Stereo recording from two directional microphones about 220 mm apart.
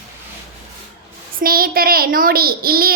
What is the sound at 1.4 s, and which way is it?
A woman's voice, 40° right (ahead or behind).